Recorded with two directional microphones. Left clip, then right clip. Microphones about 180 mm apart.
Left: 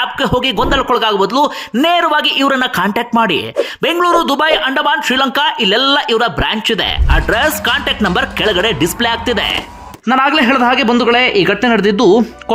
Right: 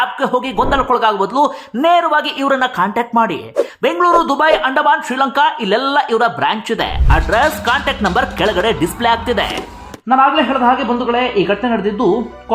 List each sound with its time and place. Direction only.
0.0 s a man's voice: 20° left (ahead or behind)
10.1 s a man's voice: 30° left (ahead or behind)